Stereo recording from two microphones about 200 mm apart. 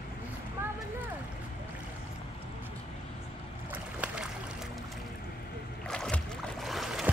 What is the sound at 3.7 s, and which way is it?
Boat, 5° right (ahead or behind).